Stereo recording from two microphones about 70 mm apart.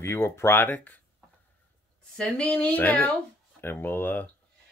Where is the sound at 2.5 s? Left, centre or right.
Left.